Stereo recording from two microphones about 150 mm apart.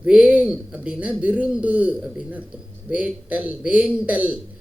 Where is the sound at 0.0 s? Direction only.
5° right (ahead or behind).